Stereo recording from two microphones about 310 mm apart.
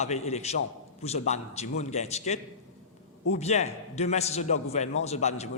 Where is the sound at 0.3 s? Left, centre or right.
Left.